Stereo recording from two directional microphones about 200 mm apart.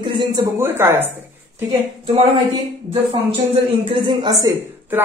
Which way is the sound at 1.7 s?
25° right (ahead or behind).